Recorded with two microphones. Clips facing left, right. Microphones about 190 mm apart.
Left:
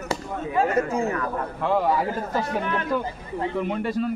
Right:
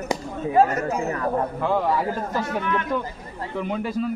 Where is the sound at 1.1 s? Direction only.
30° right (ahead or behind).